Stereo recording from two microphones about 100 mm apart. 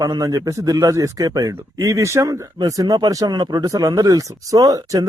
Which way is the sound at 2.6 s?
40° right (ahead or behind).